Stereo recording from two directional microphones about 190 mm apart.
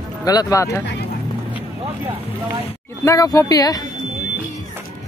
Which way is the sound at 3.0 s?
20° left (ahead or behind).